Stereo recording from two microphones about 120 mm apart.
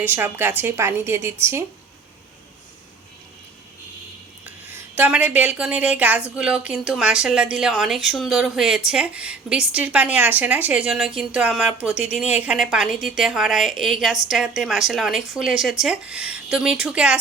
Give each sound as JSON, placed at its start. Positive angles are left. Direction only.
{"t": 0.0, "sound": "a woman's voice", "side_deg": -15}
{"t": 4.4, "sound": "a woman's voice", "side_deg": -15}